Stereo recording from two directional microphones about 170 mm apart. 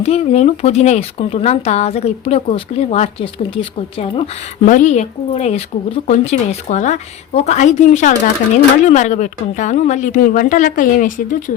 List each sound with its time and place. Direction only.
0.0 s speech: 40° left (ahead or behind)
4.6 s a woman's voice: 50° left (ahead or behind)